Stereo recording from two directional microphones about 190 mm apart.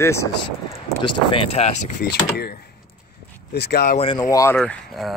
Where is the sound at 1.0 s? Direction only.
25° left (ahead or behind).